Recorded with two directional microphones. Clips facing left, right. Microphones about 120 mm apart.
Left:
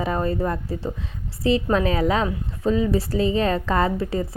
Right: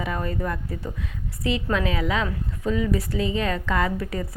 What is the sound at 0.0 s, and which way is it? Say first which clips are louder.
A woman's voice: left 5 dB; 35° left (ahead or behind).